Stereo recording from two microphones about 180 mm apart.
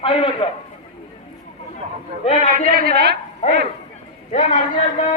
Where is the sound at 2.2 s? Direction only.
35° left (ahead or behind).